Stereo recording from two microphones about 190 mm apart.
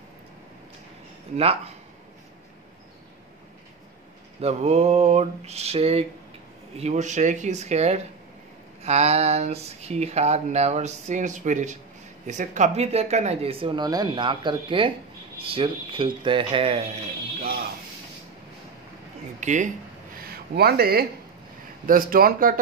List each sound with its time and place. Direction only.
1.3 s speech: 30° right (ahead or behind)
4.4 s speech: 35° right (ahead or behind)
19.4 s speech: 40° right (ahead or behind)
20.2 s a sound: 55° right (ahead or behind)
21.8 s a man's voice: 50° right (ahead or behind)